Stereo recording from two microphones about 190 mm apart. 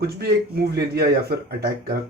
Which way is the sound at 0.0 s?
55° right (ahead or behind).